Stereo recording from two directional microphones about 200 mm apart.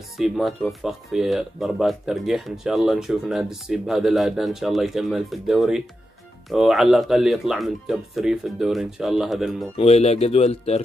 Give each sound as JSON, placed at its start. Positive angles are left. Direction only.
{"t": 0.2, "sound": "speech", "side_deg": 0}
{"t": 9.8, "sound": "speech", "side_deg": 30}